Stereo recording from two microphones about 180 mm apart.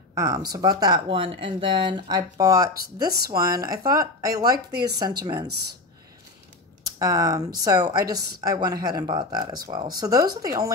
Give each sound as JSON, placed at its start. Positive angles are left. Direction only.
{"t": 0.1, "sound": "speech", "side_deg": -20}
{"t": 6.8, "sound": "speech", "side_deg": -20}